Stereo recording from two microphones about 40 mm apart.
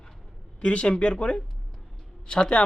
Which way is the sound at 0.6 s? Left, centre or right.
Left.